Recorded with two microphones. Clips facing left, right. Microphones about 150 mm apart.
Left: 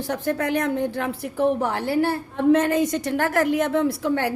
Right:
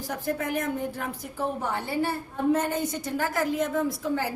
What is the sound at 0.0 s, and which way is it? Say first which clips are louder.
A woman's voice: left 5 dB; 80° left.